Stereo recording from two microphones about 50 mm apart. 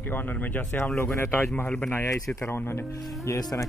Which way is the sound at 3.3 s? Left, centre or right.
Left.